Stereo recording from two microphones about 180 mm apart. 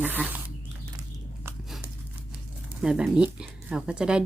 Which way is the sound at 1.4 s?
15° right (ahead or behind).